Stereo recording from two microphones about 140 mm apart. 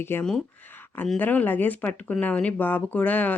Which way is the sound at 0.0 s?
15° left (ahead or behind).